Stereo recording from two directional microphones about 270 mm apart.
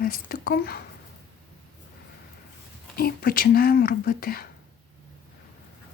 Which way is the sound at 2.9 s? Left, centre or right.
Left.